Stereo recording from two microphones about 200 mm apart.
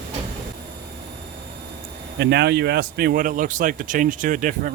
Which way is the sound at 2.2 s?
55° right (ahead or behind).